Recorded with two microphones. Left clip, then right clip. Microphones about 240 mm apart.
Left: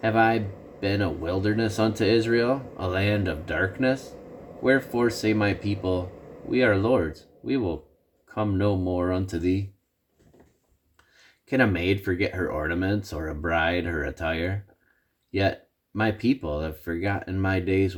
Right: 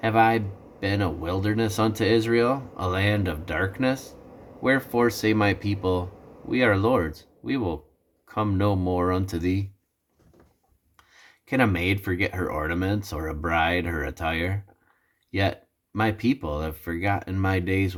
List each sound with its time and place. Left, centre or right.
0.0 s speech: centre
11.2 s speech: centre